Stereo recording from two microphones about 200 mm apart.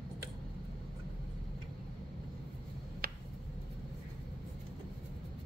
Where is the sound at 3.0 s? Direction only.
50° right (ahead or behind).